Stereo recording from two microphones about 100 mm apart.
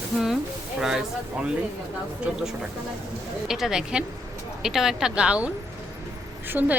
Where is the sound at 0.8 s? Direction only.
5° right (ahead or behind).